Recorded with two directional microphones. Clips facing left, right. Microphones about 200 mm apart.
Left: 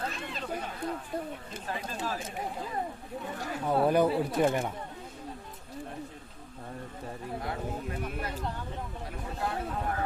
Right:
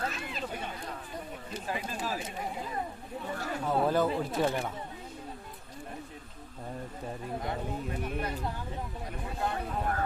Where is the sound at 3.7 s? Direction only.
15° left (ahead or behind).